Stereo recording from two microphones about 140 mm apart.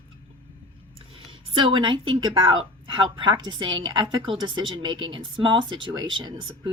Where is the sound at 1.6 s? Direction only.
35° right (ahead or behind).